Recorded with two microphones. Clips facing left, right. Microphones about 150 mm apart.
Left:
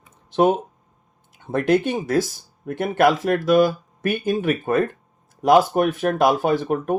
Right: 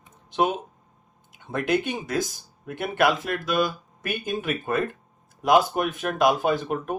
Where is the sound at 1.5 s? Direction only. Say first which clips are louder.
Left 6 dB; 50° left (ahead or behind).